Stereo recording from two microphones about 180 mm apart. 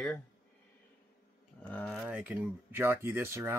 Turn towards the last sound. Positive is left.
turn(degrees=-15)  # may be behind; listen again after turning